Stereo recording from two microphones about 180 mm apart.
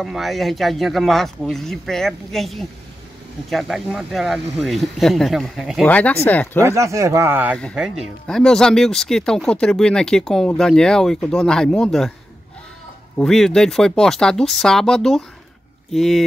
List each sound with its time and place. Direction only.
0.0 s speech: centre (ahead or behind)
6.6 s speech: 15° right (ahead or behind)
7.5 s speech: centre (ahead or behind)
13.2 s speech: centre (ahead or behind)